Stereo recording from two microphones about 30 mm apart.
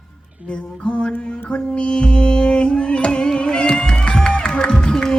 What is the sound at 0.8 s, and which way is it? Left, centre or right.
Mantra, left.